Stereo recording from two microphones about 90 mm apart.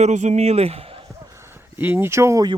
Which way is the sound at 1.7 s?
20° right (ahead or behind).